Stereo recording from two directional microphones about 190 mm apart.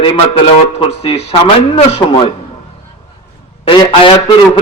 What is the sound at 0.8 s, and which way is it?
Speech, 30° left (ahead or behind).